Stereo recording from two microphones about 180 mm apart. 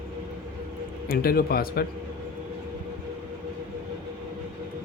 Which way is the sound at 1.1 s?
55° left (ahead or behind).